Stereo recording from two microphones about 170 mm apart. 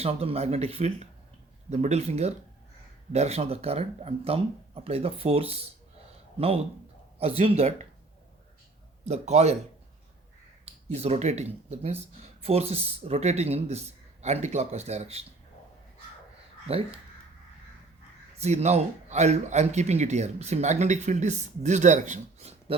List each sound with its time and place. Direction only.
0.0 s speech: 35° right (ahead or behind)
7.2 s speech: 35° right (ahead or behind)
9.0 s speech: 40° right (ahead or behind)
10.8 s speech: 35° right (ahead or behind)
16.6 s speech: 35° right (ahead or behind)
18.3 s speech: 40° right (ahead or behind)